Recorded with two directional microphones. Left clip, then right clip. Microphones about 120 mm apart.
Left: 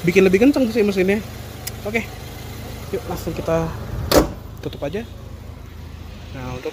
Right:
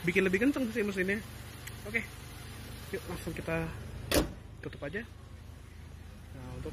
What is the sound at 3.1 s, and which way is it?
A man's voice, 10° right (ahead or behind).